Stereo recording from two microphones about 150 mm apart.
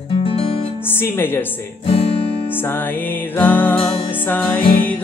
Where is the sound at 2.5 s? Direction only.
15° left (ahead or behind).